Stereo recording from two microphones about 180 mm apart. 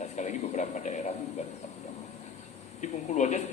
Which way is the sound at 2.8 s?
40° left (ahead or behind).